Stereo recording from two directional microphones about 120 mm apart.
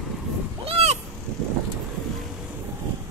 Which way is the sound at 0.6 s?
60° right (ahead or behind).